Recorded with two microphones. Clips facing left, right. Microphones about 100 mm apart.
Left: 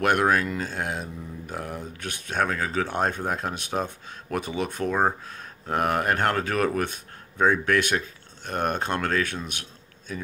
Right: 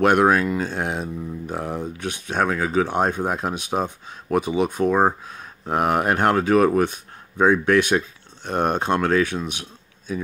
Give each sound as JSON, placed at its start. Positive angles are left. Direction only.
{"t": 0.0, "sound": "speech", "side_deg": -20}